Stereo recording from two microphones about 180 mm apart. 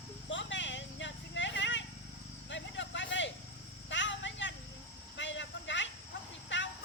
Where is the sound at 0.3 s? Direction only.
90° left.